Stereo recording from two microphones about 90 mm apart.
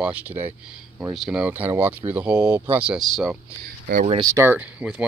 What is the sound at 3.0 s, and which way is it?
Speech, centre (ahead or behind).